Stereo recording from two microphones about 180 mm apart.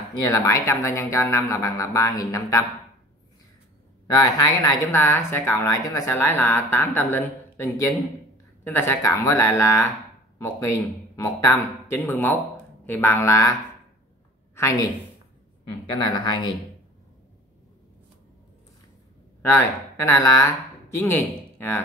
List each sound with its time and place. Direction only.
0.1 s speech: 20° left (ahead or behind)
4.1 s speech: 20° left (ahead or behind)
11.1 s speech: 15° left (ahead or behind)
14.5 s a sound: 15° left (ahead or behind)
15.9 s speech: 25° left (ahead or behind)
19.4 s speech: 15° left (ahead or behind)